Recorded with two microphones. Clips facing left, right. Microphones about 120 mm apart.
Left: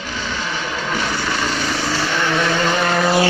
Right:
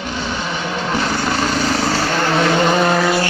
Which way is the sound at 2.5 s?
15° right (ahead or behind).